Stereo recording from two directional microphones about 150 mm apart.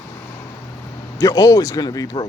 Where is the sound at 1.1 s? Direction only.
20° left (ahead or behind).